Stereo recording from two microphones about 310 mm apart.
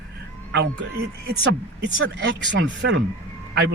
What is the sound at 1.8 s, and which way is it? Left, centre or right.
Speech, right.